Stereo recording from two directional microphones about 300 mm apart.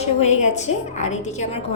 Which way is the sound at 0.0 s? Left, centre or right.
Left.